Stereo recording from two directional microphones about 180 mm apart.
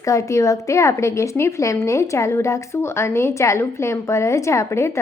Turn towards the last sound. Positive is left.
turn(degrees=15)  # may be behind; listen again after turning